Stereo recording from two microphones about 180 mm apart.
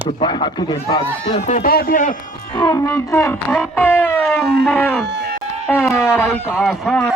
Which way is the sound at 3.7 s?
10° left (ahead or behind).